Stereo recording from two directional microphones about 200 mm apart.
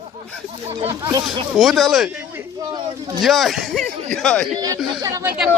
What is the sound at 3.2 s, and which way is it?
Speech, centre (ahead or behind).